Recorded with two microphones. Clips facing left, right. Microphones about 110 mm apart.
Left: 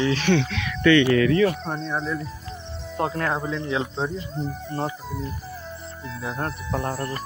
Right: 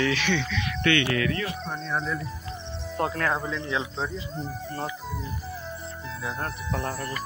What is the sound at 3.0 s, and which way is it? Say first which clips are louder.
Speech: left 2 dB; 20° left (ahead or behind).